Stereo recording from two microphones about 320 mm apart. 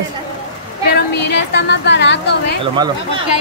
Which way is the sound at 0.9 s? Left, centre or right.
Left.